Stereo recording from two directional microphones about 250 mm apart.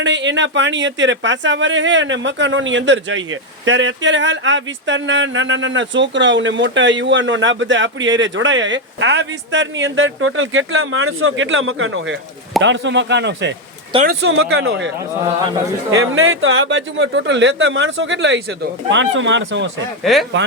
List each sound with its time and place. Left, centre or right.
0.0 s speech: right
15.9 s speech: right
20.1 s speech: centre